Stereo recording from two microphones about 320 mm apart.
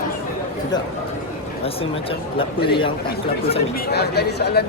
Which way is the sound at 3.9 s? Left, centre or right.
Left.